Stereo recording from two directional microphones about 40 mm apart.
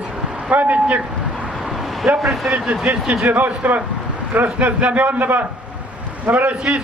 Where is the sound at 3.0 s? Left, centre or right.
Right.